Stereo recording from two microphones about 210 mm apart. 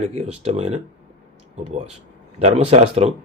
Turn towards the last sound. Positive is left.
turn(degrees=-30)  # may be behind; listen again after turning